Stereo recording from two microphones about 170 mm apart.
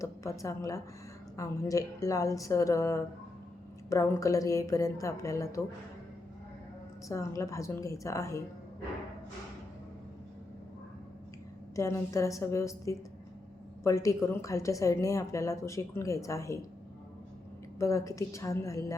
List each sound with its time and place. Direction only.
0.0 s a woman's voice: 20° left (ahead or behind)
7.1 s a woman's voice: 15° left (ahead or behind)
11.8 s a woman's voice: 20° left (ahead or behind)
17.7 s a woman's voice: 15° left (ahead or behind)